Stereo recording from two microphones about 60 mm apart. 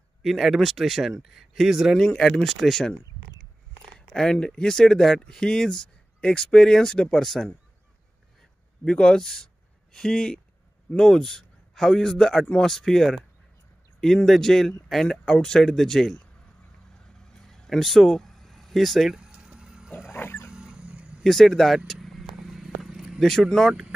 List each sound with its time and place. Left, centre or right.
0.2 s speech: centre
2.0 s speech: centre
4.1 s speech: centre
8.8 s a man's voice: centre
17.5 s a sound: centre
19.1 s a sound: centre
20.1 s wild animals: left
20.5 s vehicle: centre
21.2 s vehicle: centre
23.6 s speech: centre